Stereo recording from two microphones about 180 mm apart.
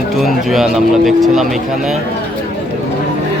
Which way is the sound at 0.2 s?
Centre (ahead or behind).